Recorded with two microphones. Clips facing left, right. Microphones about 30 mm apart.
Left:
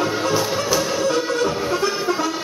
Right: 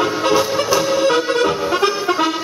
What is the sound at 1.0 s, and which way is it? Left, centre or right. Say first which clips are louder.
Music: right 4 dB; right.